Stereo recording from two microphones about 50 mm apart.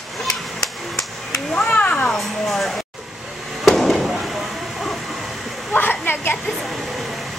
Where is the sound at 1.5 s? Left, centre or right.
Left.